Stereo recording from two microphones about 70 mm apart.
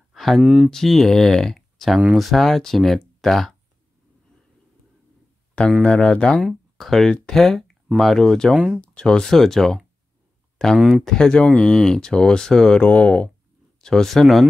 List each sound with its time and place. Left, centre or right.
0.1 s a sound: centre
0.4 s speech: centre
0.7 s speech: centre
5.9 s speech: centre
8.5 s speech: centre
8.8 s speech: centre